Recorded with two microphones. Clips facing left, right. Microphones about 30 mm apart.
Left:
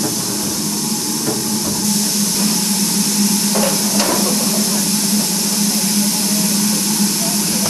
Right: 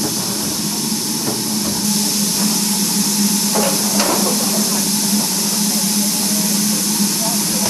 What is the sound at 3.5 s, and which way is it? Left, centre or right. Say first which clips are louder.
Stir: even; centre.